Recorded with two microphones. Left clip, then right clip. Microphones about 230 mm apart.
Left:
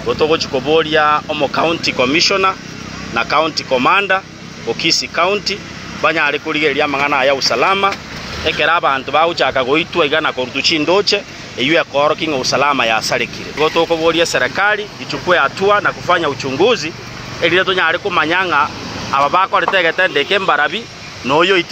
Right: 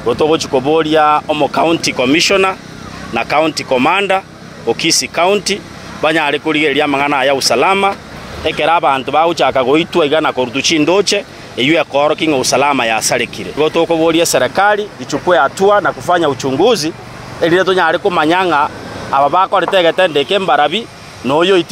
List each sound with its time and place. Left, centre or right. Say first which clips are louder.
0.1 s speech: right 2 dB; right